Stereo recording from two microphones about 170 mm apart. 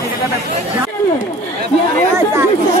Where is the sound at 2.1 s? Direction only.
15° right (ahead or behind).